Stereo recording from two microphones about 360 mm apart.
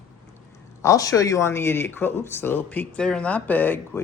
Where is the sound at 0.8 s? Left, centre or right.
Centre.